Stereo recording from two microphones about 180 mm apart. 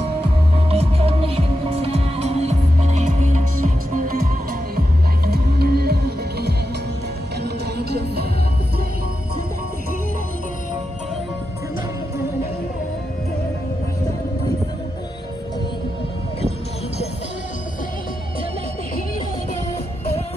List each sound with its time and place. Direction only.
0.7 s music: 35° right (ahead or behind); by 4.3 s 50° right (ahead or behind)
5.2 s music: 60° right (ahead or behind)